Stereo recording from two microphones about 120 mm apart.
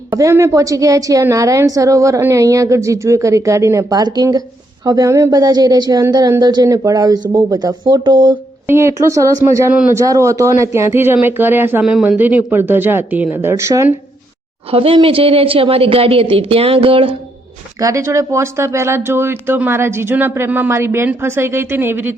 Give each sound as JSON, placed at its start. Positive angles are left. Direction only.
{"t": 0.1, "sound": "speech", "side_deg": -25}
{"t": 8.6, "sound": "speech", "side_deg": -20}
{"t": 11.8, "sound": "speech", "side_deg": -5}
{"t": 14.7, "sound": "speech", "side_deg": -50}
{"t": 17.7, "sound": "speech", "side_deg": -25}